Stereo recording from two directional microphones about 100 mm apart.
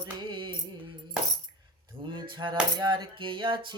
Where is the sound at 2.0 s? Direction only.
55° right (ahead or behind).